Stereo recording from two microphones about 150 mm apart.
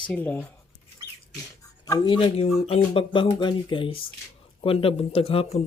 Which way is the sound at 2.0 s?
35° left (ahead or behind).